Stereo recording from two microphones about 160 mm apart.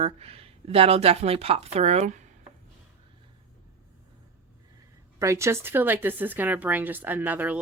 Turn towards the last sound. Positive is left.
turn(degrees=-10)  # may be behind; listen again after turning